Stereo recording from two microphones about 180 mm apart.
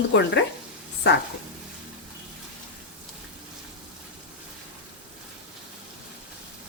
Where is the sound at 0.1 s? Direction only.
75° left (ahead or behind).